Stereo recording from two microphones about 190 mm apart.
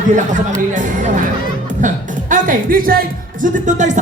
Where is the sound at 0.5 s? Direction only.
45° right (ahead or behind).